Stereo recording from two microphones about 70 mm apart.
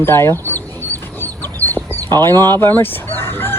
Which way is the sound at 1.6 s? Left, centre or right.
Left.